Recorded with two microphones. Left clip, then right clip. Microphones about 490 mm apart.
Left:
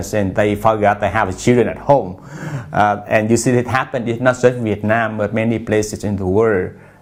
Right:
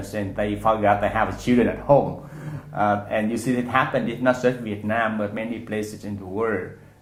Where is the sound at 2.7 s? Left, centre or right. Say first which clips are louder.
Left 8 dB; left.